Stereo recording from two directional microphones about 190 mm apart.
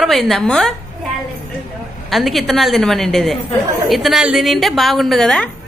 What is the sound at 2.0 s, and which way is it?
A woman's voice, centre (ahead or behind).